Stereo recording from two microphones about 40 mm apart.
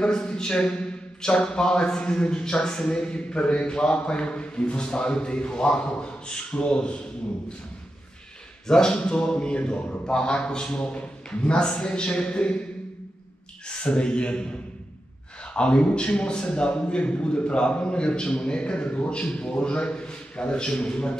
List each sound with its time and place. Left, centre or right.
0.0 s a man's voice: left
8.6 s a man's voice: centre
13.7 s speech: left
15.4 s a man's voice: left